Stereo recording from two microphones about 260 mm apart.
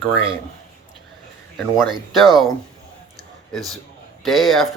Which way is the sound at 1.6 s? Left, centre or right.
Centre.